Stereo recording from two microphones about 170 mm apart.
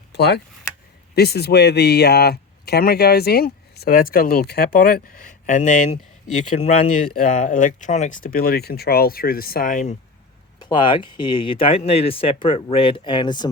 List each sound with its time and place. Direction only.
0.1 s speech: 75° left (ahead or behind); by 9.9 s 50° left (ahead or behind)
10.6 s speech: 30° left (ahead or behind)